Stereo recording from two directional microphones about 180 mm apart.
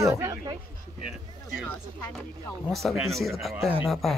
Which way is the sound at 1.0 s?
5° right (ahead or behind).